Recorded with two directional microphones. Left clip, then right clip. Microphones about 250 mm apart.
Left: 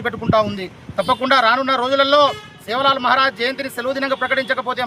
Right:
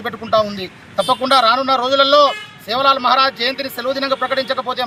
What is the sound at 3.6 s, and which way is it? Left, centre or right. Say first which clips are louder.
Speech: right 1 dB; left.